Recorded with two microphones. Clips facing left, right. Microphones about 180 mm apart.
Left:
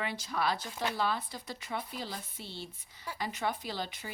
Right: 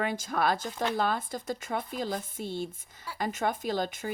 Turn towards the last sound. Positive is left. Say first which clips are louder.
# right 8 dB
turn(degrees=-50)  # may be behind; listen again after turning